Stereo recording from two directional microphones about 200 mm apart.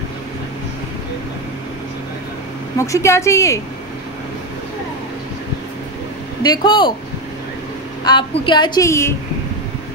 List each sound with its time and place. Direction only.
2.8 s a woman's voice: 15° left (ahead or behind)
6.4 s a woman's voice: 20° left (ahead or behind)
8.0 s a woman's voice: 25° left (ahead or behind)